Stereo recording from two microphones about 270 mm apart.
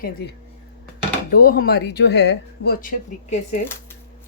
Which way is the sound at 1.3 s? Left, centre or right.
Left.